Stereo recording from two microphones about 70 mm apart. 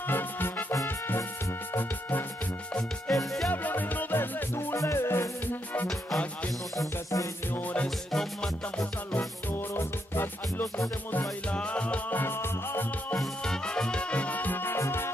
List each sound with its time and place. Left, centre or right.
0.1 s music: left
3.1 s music: centre
3.5 s music: left
5.9 s music: centre
6.8 s music: left
7.5 s music: centre
8.1 s music: centre
9.5 s music: left
11.5 s music: centre; by 12.8 s left
13.2 s music: centre; by 15.0 s left